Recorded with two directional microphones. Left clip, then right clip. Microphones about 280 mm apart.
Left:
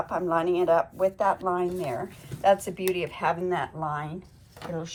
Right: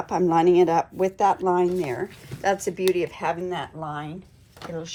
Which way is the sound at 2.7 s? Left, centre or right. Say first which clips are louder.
Right 5 dB; centre.